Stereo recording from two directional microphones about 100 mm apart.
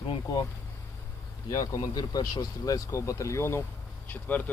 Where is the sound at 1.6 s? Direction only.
40° left (ahead or behind).